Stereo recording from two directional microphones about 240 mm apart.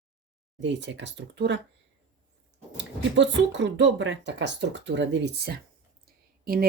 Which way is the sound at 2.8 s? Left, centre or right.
Right.